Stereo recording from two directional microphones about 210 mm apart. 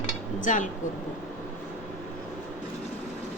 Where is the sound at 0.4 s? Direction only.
35° left (ahead or behind).